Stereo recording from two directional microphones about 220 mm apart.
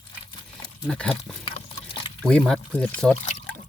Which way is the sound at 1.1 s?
25° left (ahead or behind).